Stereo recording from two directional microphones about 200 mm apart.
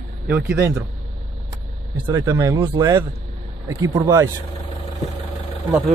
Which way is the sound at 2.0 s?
15° right (ahead or behind).